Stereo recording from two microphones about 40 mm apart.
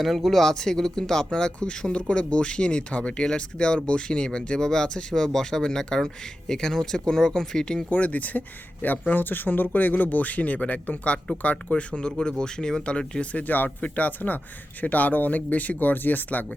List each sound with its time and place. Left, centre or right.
0.0 s speech: centre
0.4 s speech: centre
7.9 s speech: left
13.3 s speech: left